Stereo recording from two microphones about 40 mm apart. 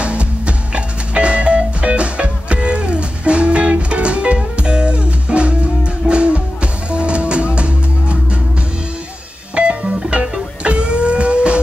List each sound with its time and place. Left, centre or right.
0.0 s music: right
9.6 s music: right